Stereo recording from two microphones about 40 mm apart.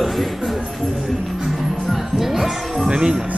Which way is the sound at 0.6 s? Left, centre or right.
Centre.